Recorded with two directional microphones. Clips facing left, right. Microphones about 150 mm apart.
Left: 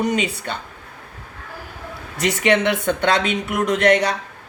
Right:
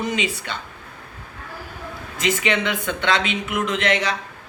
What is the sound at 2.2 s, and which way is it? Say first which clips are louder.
Speech: left 4 dB; 55° left (ahead or behind).